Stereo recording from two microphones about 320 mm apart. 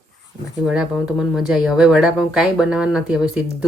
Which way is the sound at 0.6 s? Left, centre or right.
Centre.